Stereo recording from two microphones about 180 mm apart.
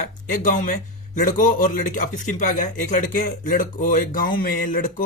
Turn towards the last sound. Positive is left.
turn(degrees=50)  # may be behind; listen again after turning